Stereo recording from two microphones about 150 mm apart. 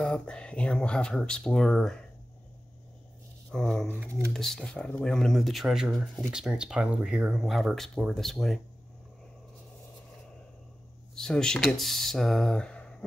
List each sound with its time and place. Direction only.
0.0 s speech: 5° left (ahead or behind)
3.5 s speech: 5° left (ahead or behind)
4.0 s speech: 15° right (ahead or behind)
4.3 s speech: 5° left (ahead or behind)
11.1 s speech: 5° left (ahead or behind)